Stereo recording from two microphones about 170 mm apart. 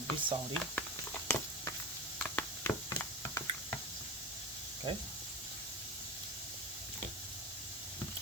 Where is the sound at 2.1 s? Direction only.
10° left (ahead or behind).